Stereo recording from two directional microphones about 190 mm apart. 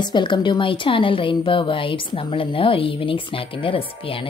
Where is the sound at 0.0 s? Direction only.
25° left (ahead or behind).